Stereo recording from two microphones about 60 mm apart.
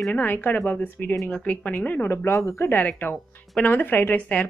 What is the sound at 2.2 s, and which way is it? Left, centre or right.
Speech, left.